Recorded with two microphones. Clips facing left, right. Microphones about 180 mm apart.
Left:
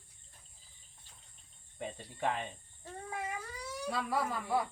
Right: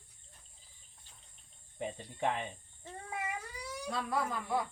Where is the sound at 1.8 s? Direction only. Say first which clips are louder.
Right 1 dB; 15° right (ahead or behind).